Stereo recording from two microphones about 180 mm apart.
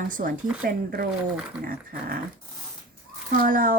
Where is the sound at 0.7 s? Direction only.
55° right (ahead or behind).